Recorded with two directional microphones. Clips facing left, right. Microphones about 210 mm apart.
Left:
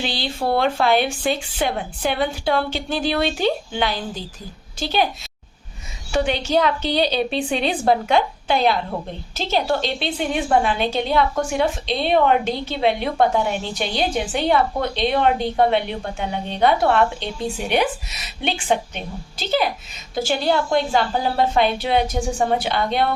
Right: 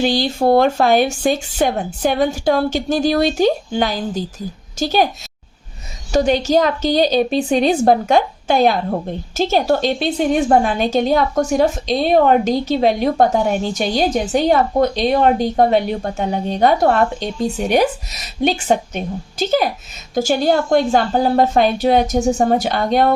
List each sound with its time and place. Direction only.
0.0 s a woman's voice: 45° right (ahead or behind)
6.1 s a woman's voice: 40° right (ahead or behind)
18.4 s a woman's voice: 40° right (ahead or behind)